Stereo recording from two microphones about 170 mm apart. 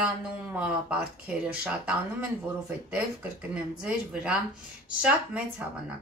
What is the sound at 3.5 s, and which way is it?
Speech, 5° right (ahead or behind).